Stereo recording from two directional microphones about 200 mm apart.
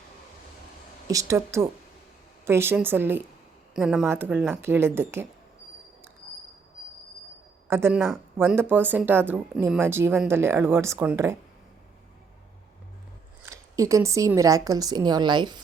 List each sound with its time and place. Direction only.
1.0 s speech: 15° right (ahead or behind)
7.7 s speech: 10° right (ahead or behind)
13.4 s speech: 15° right (ahead or behind)